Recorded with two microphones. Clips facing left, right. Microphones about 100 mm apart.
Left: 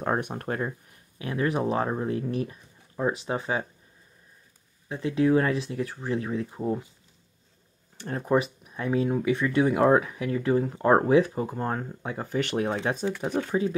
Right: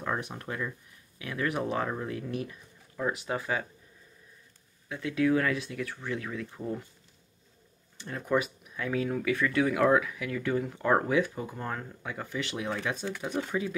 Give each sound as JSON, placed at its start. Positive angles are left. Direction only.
{"t": 0.0, "sound": "speech", "side_deg": 45}
{"t": 4.8, "sound": "speech", "side_deg": 30}
{"t": 8.1, "sound": "speech", "side_deg": 35}
{"t": 12.4, "sound": "speech", "side_deg": 50}
{"t": 13.5, "sound": "speech", "side_deg": 35}